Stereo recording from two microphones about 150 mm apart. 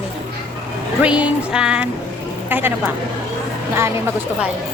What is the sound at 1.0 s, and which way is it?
Music, 5° right (ahead or behind).